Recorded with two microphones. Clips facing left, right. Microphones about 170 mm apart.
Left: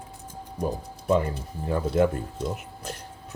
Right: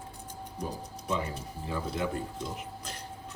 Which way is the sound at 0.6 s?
55° left (ahead or behind).